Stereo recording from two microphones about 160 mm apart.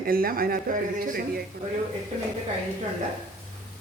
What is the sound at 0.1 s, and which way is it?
Speech, 65° right (ahead or behind).